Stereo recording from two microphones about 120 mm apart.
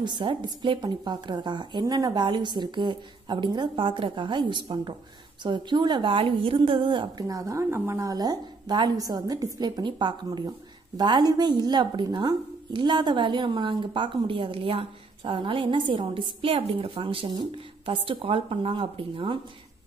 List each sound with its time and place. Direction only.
0.0 s a woman's voice: 40° right (ahead or behind)
7.2 s a woman's voice: 30° right (ahead or behind); by 19.3 s 50° right (ahead or behind)